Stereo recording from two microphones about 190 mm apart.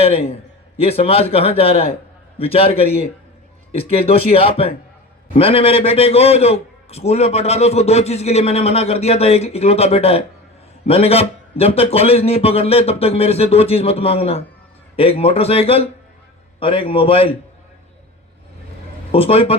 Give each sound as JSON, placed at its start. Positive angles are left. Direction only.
{"t": 0.0, "sound": "a man's voice", "side_deg": 30}
{"t": 19.1, "sound": "speech", "side_deg": 30}